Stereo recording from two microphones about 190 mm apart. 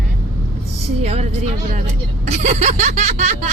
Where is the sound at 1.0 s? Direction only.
35° right (ahead or behind).